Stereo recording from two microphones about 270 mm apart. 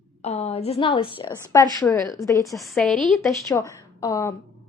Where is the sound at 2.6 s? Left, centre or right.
Centre.